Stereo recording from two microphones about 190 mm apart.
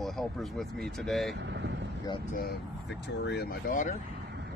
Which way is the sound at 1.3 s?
65° right (ahead or behind).